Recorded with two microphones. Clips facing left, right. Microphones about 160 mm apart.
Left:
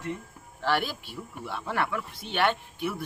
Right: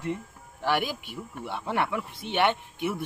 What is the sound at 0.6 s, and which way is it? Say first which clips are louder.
Speech: right 1 dB; 15° right (ahead or behind).